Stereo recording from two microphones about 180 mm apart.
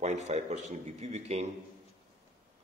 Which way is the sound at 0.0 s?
40° right (ahead or behind).